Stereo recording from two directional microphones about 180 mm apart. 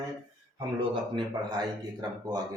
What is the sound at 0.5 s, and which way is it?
Speech, 25° right (ahead or behind).